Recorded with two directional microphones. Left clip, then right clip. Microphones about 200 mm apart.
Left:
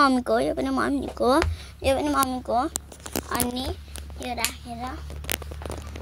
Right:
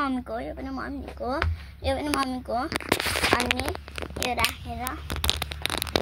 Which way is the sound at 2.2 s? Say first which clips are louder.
Left 4 dB; 15° left (ahead or behind).